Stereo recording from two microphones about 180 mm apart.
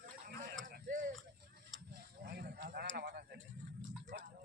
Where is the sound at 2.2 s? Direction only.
60° right (ahead or behind).